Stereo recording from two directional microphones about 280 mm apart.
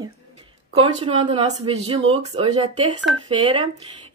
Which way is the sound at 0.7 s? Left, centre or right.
Centre.